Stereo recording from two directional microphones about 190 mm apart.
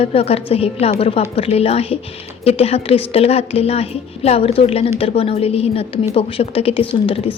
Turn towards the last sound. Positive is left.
turn(degrees=30)  # may be behind; listen again after turning